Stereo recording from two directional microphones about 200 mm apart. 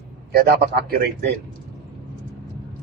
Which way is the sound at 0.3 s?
50° right (ahead or behind).